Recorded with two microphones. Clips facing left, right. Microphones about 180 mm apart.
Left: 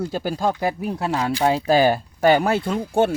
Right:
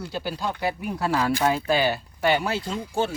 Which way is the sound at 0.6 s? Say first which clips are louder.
Left 3 dB; 35° left (ahead or behind).